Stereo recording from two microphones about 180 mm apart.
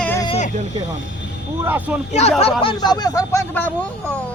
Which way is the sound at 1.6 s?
10° right (ahead or behind).